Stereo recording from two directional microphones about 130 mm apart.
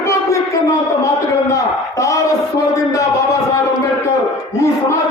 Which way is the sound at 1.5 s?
25° left (ahead or behind).